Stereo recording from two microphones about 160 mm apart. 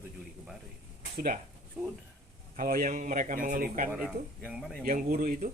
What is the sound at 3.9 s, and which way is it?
Speech, 10° right (ahead or behind).